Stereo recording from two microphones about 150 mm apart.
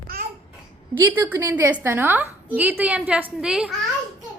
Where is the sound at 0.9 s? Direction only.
15° right (ahead or behind).